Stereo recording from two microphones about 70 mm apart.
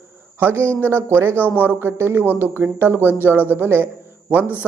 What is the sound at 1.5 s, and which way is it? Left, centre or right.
Speech, right.